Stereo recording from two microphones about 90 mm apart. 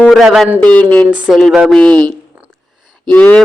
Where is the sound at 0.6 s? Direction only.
15° left (ahead or behind).